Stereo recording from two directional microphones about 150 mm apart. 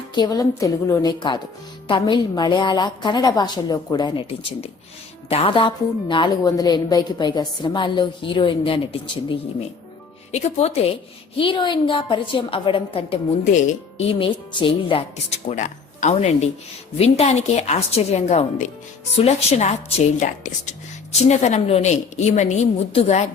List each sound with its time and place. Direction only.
0.1 s a woman's voice: 25° left (ahead or behind); by 10.9 s 45° left (ahead or behind)
11.3 s a woman's voice: 35° left (ahead or behind)
13.4 s speech: 55° left (ahead or behind)
14.2 s a woman's voice: 35° left (ahead or behind)
15.4 s a woman's voice: 50° left (ahead or behind)